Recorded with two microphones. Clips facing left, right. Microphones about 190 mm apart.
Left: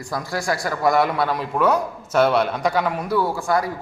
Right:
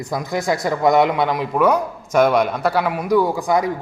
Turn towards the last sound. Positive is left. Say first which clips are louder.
# right 3 dB
turn(degrees=-20)  # may be behind; listen again after turning